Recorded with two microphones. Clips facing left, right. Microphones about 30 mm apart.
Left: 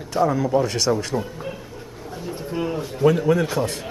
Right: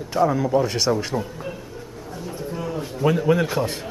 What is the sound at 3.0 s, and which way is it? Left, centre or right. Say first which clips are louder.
Speech: left 1 dB; centre.